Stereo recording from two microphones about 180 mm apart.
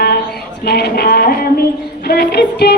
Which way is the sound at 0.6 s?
60° left (ahead or behind).